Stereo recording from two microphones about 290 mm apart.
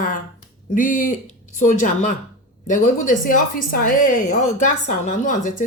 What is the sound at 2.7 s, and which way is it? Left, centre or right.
Speech, left.